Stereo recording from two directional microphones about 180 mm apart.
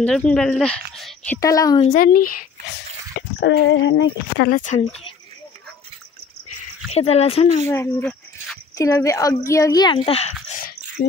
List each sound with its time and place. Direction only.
0.0 s speech: 5° left (ahead or behind)
1.4 s speech: 20° left (ahead or behind)
1.9 s speech: 50° left (ahead or behind)
3.4 s speech: 75° left (ahead or behind)
4.5 s speech: 45° left (ahead or behind)
6.9 s speech: 35° left (ahead or behind)
7.6 s a sound: 15° left (ahead or behind)
8.7 s speech: 20° left (ahead or behind); by 10.6 s 35° left (ahead or behind)
11.0 s speech: 45° left (ahead or behind)